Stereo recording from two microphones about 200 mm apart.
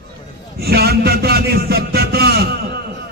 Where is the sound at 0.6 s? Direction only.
50° right (ahead or behind).